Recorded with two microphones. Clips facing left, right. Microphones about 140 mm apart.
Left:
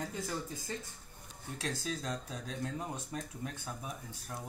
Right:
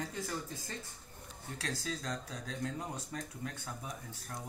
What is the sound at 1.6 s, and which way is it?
Speech, 20° left (ahead or behind).